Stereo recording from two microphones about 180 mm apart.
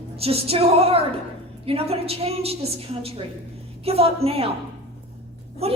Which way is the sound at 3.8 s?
35° right (ahead or behind).